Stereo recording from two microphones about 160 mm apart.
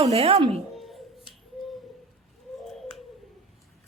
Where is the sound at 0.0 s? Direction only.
40° right (ahead or behind).